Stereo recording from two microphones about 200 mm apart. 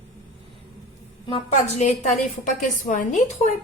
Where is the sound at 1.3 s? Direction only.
30° left (ahead or behind).